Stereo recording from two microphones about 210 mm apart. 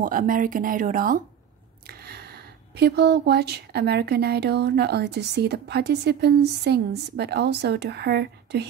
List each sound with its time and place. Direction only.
0.0 s speech: 40° right (ahead or behind)